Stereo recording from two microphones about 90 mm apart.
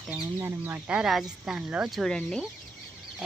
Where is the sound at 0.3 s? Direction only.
25° right (ahead or behind).